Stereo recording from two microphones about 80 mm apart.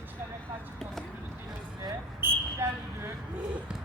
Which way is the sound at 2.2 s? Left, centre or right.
Right.